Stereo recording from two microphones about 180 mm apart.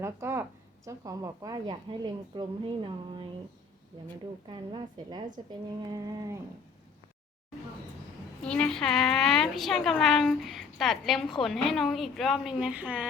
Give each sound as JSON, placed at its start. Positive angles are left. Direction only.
{"t": 0.0, "sound": "a woman's voice", "side_deg": -15}
{"t": 4.4, "sound": "a woman's voice", "side_deg": -25}
{"t": 8.4, "sound": "a woman's voice", "side_deg": 5}